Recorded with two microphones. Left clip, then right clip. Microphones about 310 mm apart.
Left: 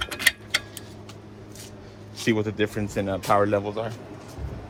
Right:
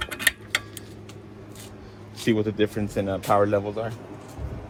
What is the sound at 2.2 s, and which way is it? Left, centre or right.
Speech, left.